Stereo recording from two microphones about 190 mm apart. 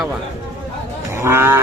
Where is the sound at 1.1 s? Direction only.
15° right (ahead or behind).